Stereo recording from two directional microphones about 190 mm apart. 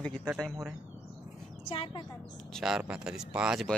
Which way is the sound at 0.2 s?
5° right (ahead or behind).